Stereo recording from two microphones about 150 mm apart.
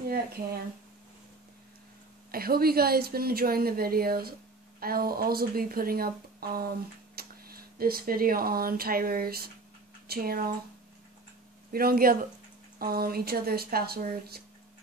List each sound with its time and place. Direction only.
2.3 s a woman's voice: 85° right
11.7 s a woman's voice: 80° right